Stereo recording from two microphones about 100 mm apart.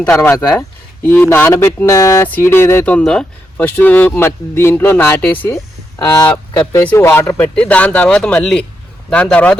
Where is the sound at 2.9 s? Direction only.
10° left (ahead or behind).